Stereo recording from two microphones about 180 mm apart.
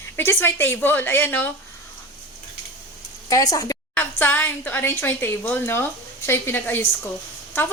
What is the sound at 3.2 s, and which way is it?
A woman's voice, 20° left (ahead or behind).